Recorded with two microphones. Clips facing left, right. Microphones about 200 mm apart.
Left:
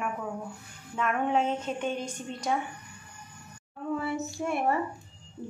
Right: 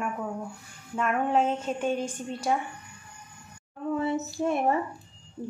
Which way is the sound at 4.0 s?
20° right (ahead or behind).